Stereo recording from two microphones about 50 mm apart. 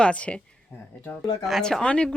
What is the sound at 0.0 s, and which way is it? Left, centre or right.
Speech, left.